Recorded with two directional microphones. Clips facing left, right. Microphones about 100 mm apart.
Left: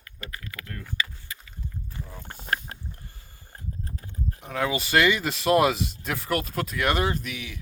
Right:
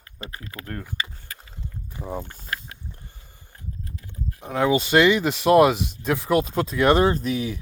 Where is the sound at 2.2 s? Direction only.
50° left (ahead or behind).